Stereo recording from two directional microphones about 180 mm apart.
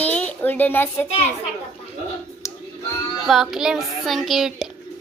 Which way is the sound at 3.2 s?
Centre (ahead or behind).